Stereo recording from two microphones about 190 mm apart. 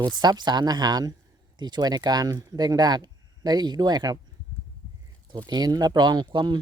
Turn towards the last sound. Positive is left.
turn(degrees=-25)  # may be behind; listen again after turning